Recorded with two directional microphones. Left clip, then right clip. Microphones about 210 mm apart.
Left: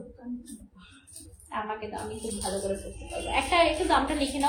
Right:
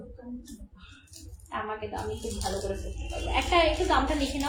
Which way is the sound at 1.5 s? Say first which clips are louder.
Even; 20° left (ahead or behind).